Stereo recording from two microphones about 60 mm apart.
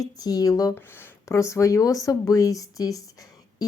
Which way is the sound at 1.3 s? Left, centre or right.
Left.